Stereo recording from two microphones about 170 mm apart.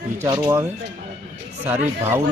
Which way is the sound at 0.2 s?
15° right (ahead or behind).